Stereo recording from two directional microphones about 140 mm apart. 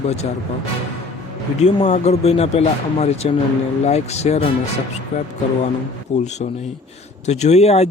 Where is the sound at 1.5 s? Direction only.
50° left (ahead or behind).